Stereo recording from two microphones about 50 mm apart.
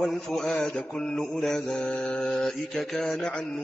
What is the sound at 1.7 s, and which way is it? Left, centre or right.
Speech, centre.